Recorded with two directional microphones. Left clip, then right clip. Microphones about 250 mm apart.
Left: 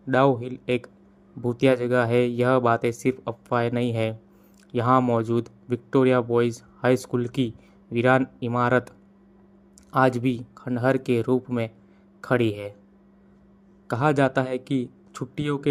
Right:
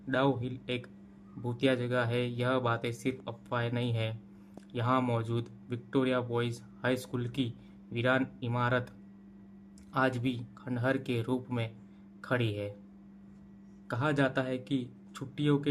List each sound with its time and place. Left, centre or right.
0.1 s speech: left
9.9 s speech: left
13.8 s speech: left